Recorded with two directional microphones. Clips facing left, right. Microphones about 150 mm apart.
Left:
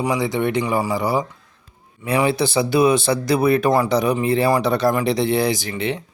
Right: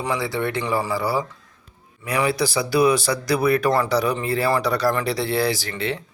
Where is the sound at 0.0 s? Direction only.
15° left (ahead or behind).